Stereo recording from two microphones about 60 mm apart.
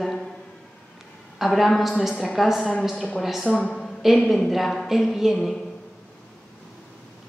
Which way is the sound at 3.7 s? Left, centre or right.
Centre.